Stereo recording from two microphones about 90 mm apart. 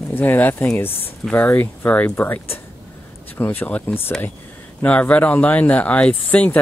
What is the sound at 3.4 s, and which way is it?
Speech, 20° left (ahead or behind).